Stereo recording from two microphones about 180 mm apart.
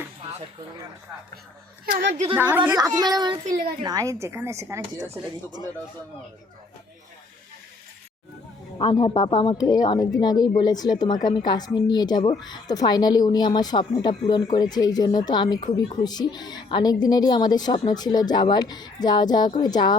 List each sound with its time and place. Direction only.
1.9 s a woman's voice: 80° right
2.3 s speech: 10° right (ahead or behind)
2.7 s speech: 20° right (ahead or behind)
8.8 s speech: 30° left (ahead or behind)